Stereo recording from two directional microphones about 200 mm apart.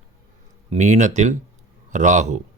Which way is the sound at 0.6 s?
35° right (ahead or behind).